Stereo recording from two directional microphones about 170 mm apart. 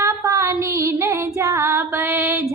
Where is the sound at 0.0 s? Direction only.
20° right (ahead or behind).